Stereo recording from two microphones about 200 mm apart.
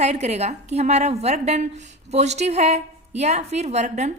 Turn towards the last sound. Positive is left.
turn(degrees=-35)  # may be behind; listen again after turning